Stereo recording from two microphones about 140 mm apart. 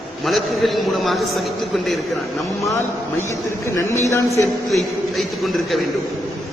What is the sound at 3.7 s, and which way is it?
Speech, 20° left (ahead or behind).